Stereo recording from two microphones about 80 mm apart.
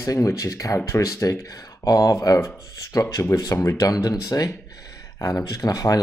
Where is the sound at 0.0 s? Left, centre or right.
Left.